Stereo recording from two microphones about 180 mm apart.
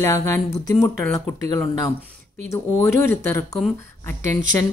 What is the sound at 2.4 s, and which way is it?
A woman's voice, 15° left (ahead or behind).